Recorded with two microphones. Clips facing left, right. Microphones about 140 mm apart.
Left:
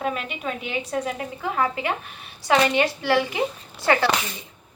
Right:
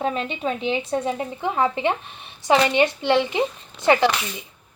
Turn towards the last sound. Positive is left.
turn(degrees=-20)  # may be behind; listen again after turning